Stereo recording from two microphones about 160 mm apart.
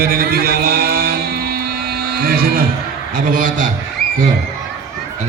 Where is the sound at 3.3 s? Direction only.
55° right (ahead or behind).